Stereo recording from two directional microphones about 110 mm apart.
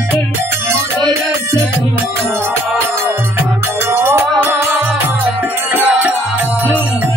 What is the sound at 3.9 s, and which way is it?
Music, 20° right (ahead or behind).